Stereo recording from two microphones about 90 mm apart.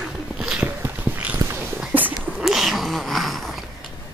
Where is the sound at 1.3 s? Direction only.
30° right (ahead or behind).